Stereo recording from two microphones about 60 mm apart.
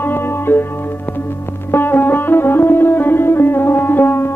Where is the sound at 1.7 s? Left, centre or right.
Left.